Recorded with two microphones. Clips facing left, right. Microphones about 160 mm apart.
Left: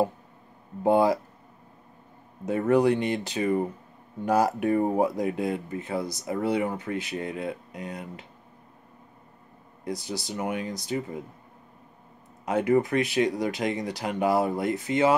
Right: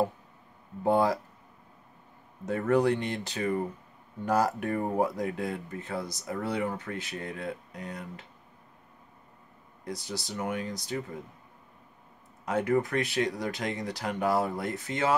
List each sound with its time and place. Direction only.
0.8 s speech: 15° left (ahead or behind)
2.4 s speech: 15° left (ahead or behind)
9.8 s speech: 20° left (ahead or behind)
12.4 s speech: 15° left (ahead or behind)